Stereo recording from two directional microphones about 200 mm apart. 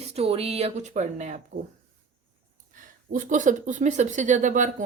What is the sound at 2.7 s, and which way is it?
A woman's voice, 40° right (ahead or behind).